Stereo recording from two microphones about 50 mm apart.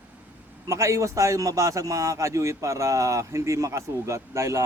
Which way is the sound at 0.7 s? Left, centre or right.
Right.